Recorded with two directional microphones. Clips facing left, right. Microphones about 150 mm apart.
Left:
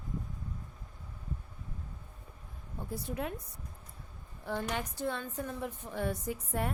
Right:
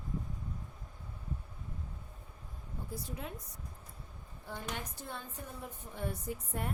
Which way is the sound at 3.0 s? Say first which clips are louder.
Left 11 dB; 60° left (ahead or behind).